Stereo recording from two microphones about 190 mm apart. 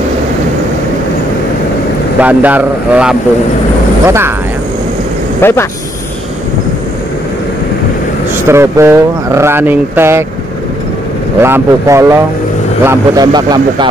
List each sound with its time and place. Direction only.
2.1 s speech: 10° right (ahead or behind)
5.4 s speech: 10° left (ahead or behind)
8.5 s speech: 15° right (ahead or behind)
11.4 s speech: 15° right (ahead or behind)